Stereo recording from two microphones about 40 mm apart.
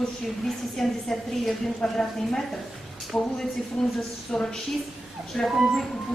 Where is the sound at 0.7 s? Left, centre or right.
Centre.